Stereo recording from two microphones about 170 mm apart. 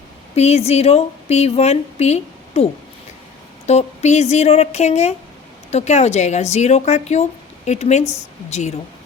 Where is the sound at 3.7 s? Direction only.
40° left (ahead or behind).